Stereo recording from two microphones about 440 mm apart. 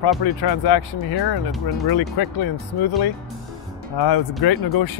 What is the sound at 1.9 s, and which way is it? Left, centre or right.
Speech, left.